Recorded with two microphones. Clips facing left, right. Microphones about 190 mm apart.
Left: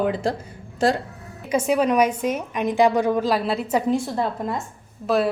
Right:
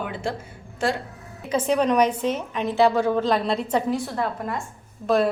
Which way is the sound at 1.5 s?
10° left (ahead or behind).